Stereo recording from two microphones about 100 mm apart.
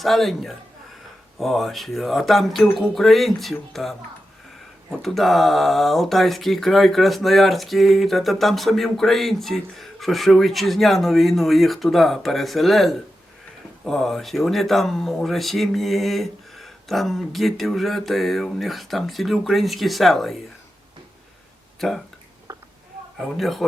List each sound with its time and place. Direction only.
0.0 s speech: centre (ahead or behind)
21.8 s speech: centre (ahead or behind)
22.5 s a sound: 35° right (ahead or behind)
23.1 s speech: centre (ahead or behind)